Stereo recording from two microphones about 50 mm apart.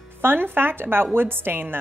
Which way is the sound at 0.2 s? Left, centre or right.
Right.